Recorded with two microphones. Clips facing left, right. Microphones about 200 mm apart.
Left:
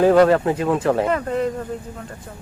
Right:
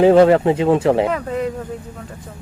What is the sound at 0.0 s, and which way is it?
Speech, 25° right (ahead or behind).